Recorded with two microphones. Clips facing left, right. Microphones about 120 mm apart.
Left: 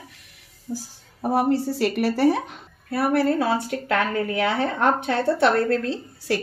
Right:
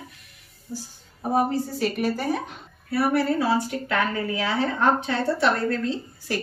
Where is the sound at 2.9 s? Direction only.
55° left (ahead or behind).